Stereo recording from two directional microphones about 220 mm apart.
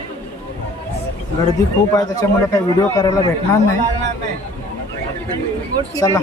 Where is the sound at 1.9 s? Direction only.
15° left (ahead or behind).